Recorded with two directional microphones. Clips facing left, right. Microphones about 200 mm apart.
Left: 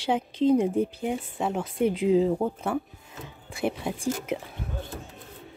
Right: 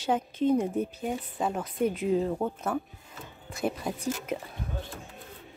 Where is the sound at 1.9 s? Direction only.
90° left.